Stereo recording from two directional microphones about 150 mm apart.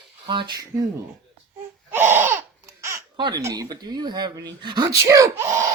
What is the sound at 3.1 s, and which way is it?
Speech, 30° right (ahead or behind).